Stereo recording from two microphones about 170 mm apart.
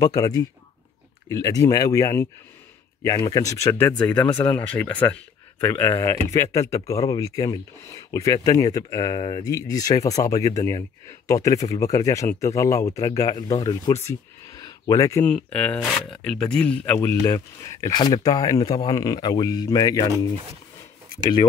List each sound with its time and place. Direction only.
0.0 s speech: 20° left (ahead or behind)
15.2 s speech: 5° left (ahead or behind); by 20.1 s 25° left (ahead or behind)